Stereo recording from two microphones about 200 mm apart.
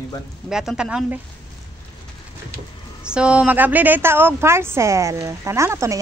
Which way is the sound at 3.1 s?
5° right (ahead or behind).